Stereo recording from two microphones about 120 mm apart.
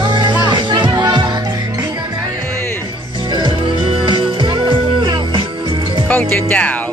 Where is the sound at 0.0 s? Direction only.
40° right (ahead or behind).